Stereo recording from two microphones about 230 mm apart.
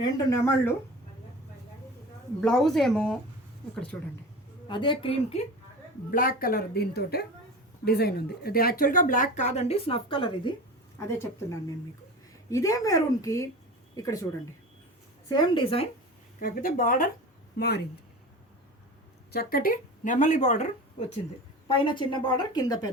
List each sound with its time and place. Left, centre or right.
0.0 s a woman's voice: centre
2.4 s a woman's voice: centre
4.7 s a woman's voice: left
6.1 s speech: left
12.5 s a woman's voice: centre
15.3 s a woman's voice: centre
16.4 s speech: left
19.3 s speech: left
21.7 s a woman's voice: left